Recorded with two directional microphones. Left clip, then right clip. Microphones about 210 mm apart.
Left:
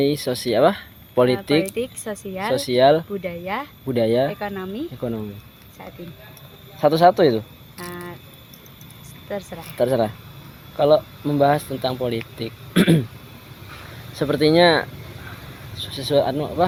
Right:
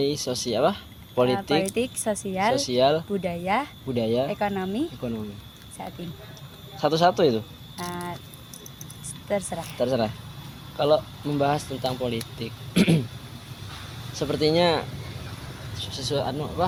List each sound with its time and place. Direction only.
0.0 s speech: 50° left (ahead or behind)
1.7 s speech: 15° right (ahead or behind)
2.6 s speech: 45° left (ahead or behind)
3.2 s speech: 15° right (ahead or behind)
3.8 s speech: 50° left (ahead or behind)
4.3 s speech: 15° right (ahead or behind)
6.7 s speech: 40° left (ahead or behind)
7.8 s cricket: 15° right (ahead or behind)
9.3 s speech: 15° right (ahead or behind)
9.7 s speech: 45° left (ahead or behind)
14.4 s speech: 45° left (ahead or behind)